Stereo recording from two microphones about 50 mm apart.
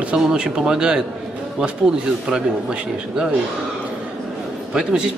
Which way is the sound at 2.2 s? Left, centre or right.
Centre.